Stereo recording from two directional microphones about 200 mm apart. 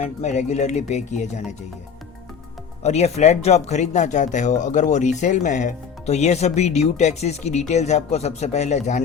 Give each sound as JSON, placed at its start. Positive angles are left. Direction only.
{"t": 0.0, "sound": "speech", "side_deg": 35}
{"t": 2.8, "sound": "speech", "side_deg": 35}